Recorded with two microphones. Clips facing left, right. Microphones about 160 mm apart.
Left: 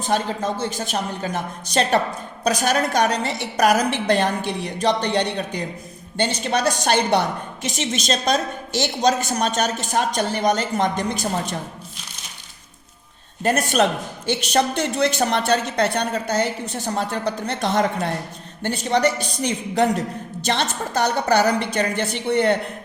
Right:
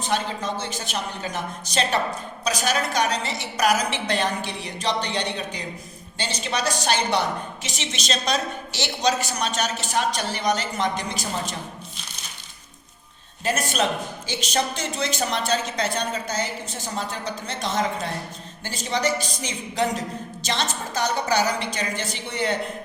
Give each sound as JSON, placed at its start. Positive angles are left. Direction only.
{"t": 0.0, "sound": "a woman's voice", "side_deg": 50}
{"t": 13.4, "sound": "a woman's voice", "side_deg": 60}